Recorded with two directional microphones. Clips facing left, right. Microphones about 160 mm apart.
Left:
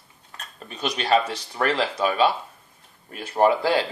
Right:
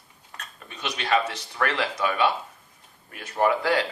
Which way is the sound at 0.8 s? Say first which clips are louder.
Left 3 dB; 35° left (ahead or behind).